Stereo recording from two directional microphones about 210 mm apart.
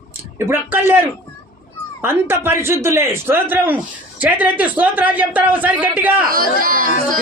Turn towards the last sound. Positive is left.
turn(degrees=-40)  # may be behind; listen again after turning